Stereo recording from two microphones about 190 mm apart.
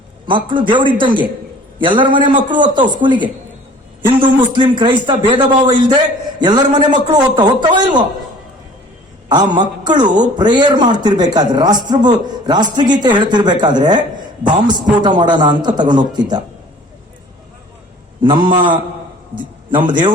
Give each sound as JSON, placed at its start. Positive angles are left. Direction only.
{"t": 0.3, "sound": "a man's voice", "side_deg": -25}
{"t": 9.3, "sound": "a man's voice", "side_deg": -20}
{"t": 15.0, "sound": "a man's voice", "side_deg": -25}
{"t": 18.2, "sound": "a man's voice", "side_deg": -25}